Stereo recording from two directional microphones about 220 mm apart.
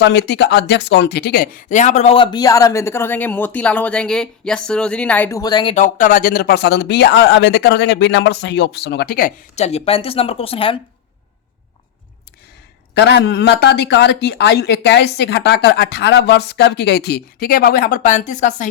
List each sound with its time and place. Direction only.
0.0 s speech: 50° left (ahead or behind); by 5.7 s 20° left (ahead or behind)
5.7 s speech: 35° left (ahead or behind)
12.9 s speech: 50° left (ahead or behind)